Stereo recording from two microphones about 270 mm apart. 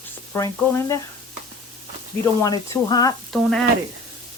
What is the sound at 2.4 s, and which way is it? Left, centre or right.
Speech, centre.